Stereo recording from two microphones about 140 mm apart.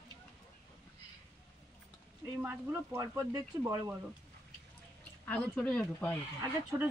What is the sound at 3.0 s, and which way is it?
Speech, 25° right (ahead or behind).